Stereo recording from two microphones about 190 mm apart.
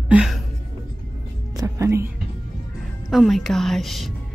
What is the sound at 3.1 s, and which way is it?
A woman's voice, centre (ahead or behind).